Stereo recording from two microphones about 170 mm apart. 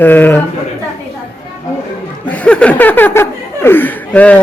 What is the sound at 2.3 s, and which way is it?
Speech, 5° left (ahead or behind).